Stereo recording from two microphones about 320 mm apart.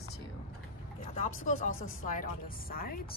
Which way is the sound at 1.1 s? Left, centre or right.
Left.